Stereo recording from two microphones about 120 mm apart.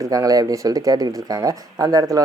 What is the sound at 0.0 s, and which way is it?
Speech, 30° right (ahead or behind).